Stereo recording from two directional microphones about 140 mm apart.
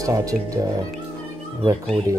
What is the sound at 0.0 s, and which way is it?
Speech, 25° right (ahead or behind).